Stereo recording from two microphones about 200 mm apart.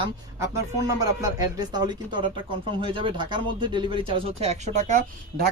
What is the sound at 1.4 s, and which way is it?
Speech, 20° right (ahead or behind).